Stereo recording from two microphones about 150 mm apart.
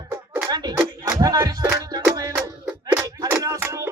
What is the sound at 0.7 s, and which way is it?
Music, 20° right (ahead or behind).